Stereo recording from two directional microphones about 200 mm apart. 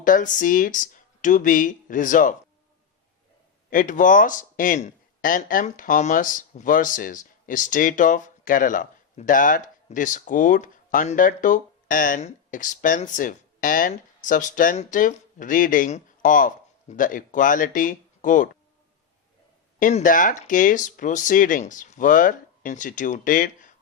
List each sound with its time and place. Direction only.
0.0 s speech: 40° left (ahead or behind)
3.7 s speech: 40° left (ahead or behind)
19.8 s speech: 40° left (ahead or behind)